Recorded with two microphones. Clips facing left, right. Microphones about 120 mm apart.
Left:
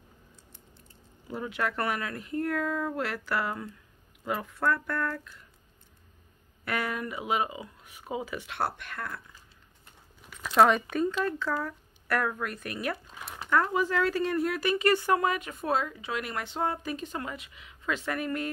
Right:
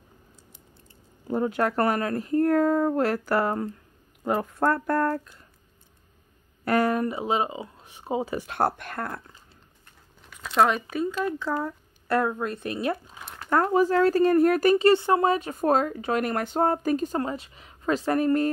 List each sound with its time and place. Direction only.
1.2 s speech: 40° right (ahead or behind)
6.6 s speech: 40° right (ahead or behind)
10.4 s speech: centre (ahead or behind)
11.2 s speech: 20° right (ahead or behind)
13.5 s speech: 40° right (ahead or behind)
14.8 s speech: 25° right (ahead or behind)